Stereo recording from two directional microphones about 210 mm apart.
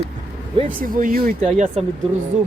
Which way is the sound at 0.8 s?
40° right (ahead or behind).